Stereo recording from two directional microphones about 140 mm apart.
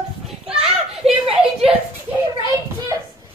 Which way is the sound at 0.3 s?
5° right (ahead or behind).